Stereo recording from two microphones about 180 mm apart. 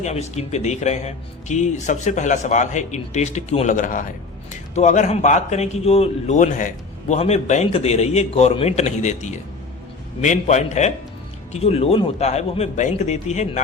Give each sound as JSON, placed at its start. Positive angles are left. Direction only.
{"t": 0.0, "sound": "a man's voice", "side_deg": 35}